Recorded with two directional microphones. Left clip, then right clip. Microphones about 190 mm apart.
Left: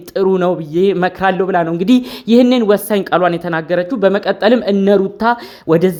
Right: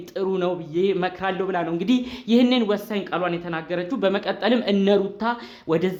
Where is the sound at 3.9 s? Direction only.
30° left (ahead or behind).